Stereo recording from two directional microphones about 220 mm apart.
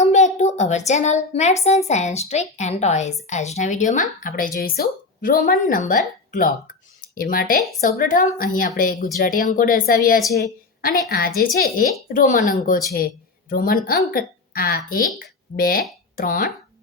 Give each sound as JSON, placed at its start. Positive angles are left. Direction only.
{"t": 0.0, "sound": "a woman's voice", "side_deg": 30}
{"t": 7.0, "sound": "a woman's voice", "side_deg": 40}